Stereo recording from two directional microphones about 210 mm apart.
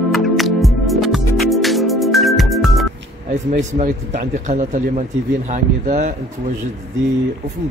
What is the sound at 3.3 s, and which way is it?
Speech, 35° right (ahead or behind).